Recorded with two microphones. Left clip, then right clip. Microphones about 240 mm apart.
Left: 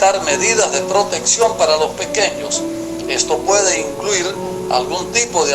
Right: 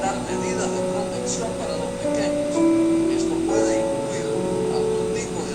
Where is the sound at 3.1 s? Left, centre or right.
Left.